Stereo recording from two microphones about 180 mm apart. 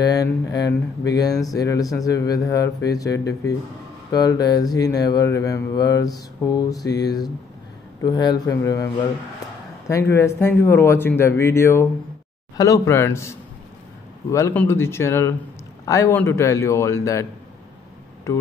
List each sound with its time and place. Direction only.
0.0 s speech: 20° left (ahead or behind)
8.0 s speech: 25° left (ahead or behind)